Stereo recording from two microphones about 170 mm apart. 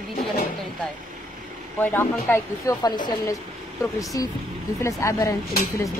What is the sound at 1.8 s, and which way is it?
Speech, 10° left (ahead or behind).